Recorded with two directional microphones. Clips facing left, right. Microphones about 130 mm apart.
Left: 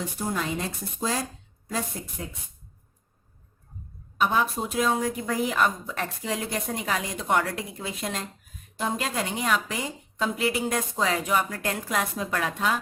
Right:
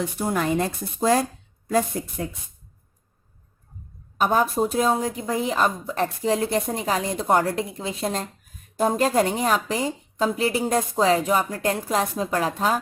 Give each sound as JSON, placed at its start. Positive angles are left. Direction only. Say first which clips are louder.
{"t": 0.2, "sound": "a woman's voice", "louder": "right 6 dB", "side_deg": -60}
{"t": 4.2, "sound": "a woman's voice", "louder": "right 4 dB", "side_deg": -40}
{"t": 8.7, "sound": "a woman's voice", "louder": "right 9 dB", "side_deg": -45}